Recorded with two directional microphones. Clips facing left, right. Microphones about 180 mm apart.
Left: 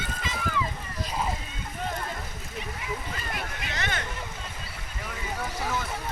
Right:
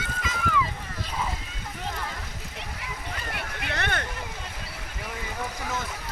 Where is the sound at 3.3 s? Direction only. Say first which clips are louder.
Right 4 dB; 60° right (ahead or behind).